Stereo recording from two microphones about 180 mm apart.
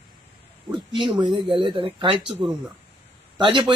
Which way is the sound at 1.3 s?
Centre (ahead or behind).